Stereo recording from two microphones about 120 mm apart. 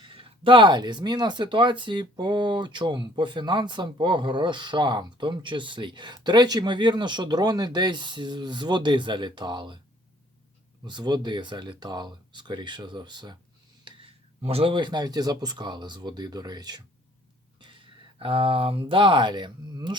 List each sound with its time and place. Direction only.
0.0 s speech: 45° right (ahead or behind)
10.8 s speech: 35° right (ahead or behind)
13.8 s speech: 50° right (ahead or behind); by 16.8 s 35° right (ahead or behind)
17.6 s speech: 45° right (ahead or behind)